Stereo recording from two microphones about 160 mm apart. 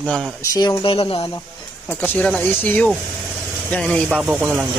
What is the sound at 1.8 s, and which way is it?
A man's voice, 10° left (ahead or behind).